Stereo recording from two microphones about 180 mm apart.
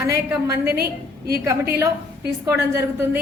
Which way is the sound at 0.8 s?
60° right (ahead or behind).